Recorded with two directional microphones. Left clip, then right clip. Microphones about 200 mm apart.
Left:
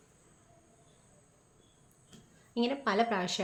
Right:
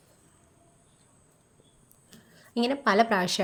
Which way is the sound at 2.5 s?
40° right (ahead or behind).